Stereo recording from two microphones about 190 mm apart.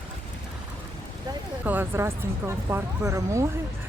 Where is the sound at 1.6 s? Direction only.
10° right (ahead or behind).